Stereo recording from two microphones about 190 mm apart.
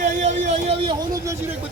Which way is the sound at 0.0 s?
40° right (ahead or behind).